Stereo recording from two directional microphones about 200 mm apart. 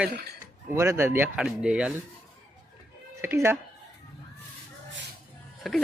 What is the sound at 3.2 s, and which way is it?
Speech, 10° right (ahead or behind).